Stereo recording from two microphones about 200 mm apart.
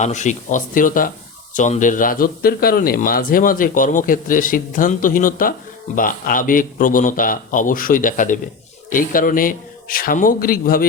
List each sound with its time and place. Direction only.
0.0 s a man's voice: 35° left (ahead or behind)